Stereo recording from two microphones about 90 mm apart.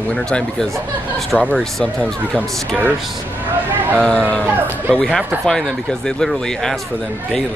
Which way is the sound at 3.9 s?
10° left (ahead or behind).